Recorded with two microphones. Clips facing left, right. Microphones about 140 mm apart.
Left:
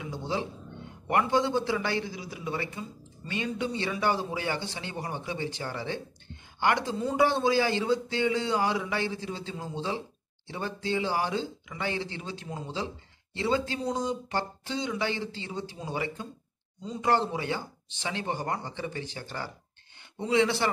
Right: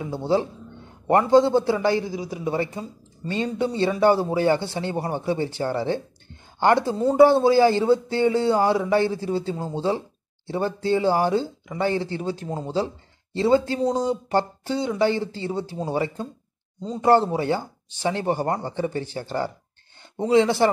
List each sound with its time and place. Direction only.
0.0 s speech: 35° right (ahead or behind)